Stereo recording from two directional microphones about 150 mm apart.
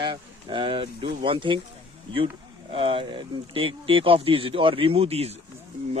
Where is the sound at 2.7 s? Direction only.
35° right (ahead or behind).